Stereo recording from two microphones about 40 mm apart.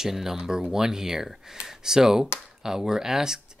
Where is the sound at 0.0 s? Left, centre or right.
Centre.